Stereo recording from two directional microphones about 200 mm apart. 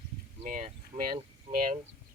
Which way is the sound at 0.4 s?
40° right (ahead or behind).